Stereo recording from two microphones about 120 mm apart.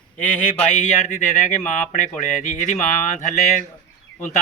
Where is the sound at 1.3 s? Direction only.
90° left.